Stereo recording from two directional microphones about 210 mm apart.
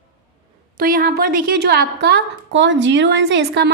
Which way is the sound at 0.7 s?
45° right (ahead or behind).